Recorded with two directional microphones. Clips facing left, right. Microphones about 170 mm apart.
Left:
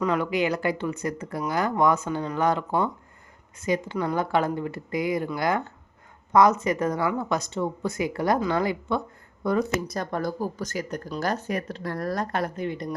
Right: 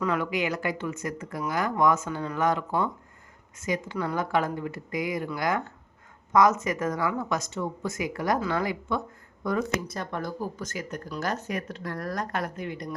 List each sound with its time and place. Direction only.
0.0 s speech: 25° left (ahead or behind)
9.8 s speech: 40° left (ahead or behind)